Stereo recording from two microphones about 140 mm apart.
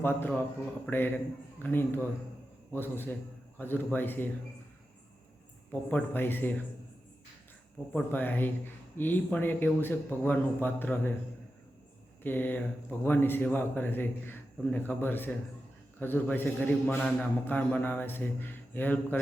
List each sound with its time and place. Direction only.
0.0 s speech: 15° left (ahead or behind)
5.9 s speech: 15° left (ahead or behind)
7.9 s speech: 15° left (ahead or behind)
12.2 s speech: 15° left (ahead or behind)